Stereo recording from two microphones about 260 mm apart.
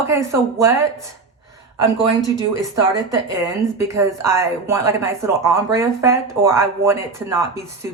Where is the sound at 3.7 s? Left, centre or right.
Centre.